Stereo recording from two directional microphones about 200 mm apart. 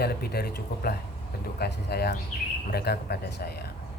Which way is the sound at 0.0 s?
50° left (ahead or behind).